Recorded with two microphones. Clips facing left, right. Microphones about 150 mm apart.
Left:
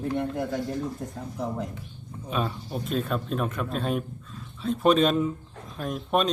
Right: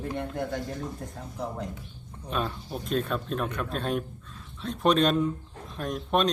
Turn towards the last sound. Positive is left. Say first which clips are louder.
# left 1 dB
turn(degrees=0)  # may be behind; listen again after turning